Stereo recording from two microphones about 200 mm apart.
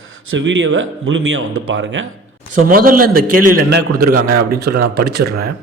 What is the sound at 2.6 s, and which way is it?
A man's voice, 45° right (ahead or behind).